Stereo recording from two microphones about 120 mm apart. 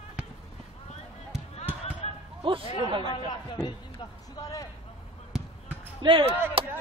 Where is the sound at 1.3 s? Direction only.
60° right (ahead or behind).